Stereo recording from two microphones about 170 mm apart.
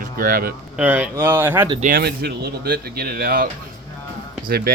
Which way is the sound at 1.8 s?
65° right (ahead or behind).